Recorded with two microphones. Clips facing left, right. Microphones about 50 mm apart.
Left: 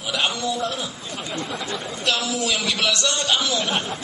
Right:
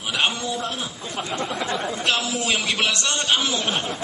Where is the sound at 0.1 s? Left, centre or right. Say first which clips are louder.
Even; right.